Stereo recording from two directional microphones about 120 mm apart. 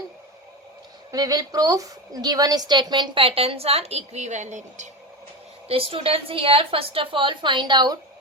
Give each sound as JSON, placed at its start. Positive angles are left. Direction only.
{"t": 1.1, "sound": "a woman's voice", "side_deg": -35}
{"t": 5.6, "sound": "a woman's voice", "side_deg": -50}